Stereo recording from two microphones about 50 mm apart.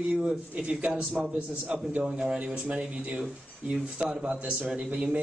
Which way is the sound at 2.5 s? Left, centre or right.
Right.